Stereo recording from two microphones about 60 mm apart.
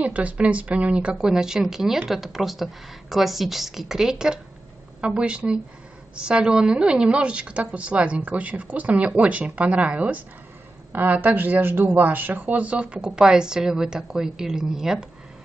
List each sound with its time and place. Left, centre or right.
0.0 s speech: right
10.9 s speech: right; by 15.0 s centre